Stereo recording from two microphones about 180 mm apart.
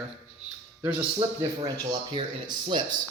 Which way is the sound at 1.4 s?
25° right (ahead or behind).